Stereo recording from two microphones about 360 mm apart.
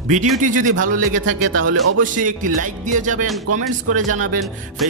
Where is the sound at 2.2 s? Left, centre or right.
Right.